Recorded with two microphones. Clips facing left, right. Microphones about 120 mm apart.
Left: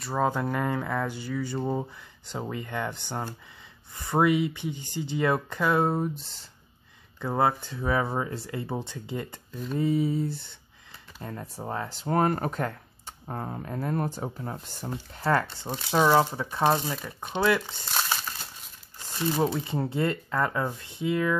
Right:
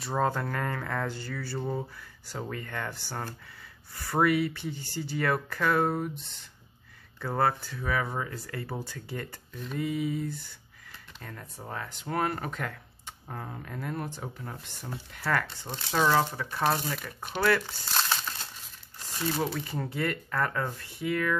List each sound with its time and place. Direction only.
0.0 s speech: 5° left (ahead or behind); by 6.3 s 30° left (ahead or behind)
7.2 s speech: 15° left (ahead or behind)
9.7 s speech: 30° left (ahead or behind)
15.7 s speech: 15° left (ahead or behind)
19.4 s speech: 25° left (ahead or behind)